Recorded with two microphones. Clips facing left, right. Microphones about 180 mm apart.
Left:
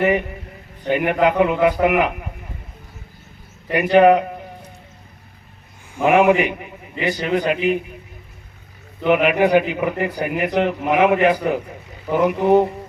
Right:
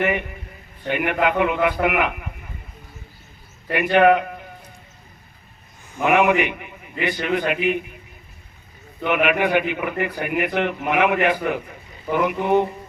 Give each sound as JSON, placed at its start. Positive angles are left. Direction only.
{"t": 0.0, "sound": "a man's voice", "side_deg": 35}
{"t": 3.8, "sound": "a man's voice", "side_deg": 35}
{"t": 6.1, "sound": "a man's voice", "side_deg": 30}
{"t": 9.0, "sound": "a man's voice", "side_deg": 35}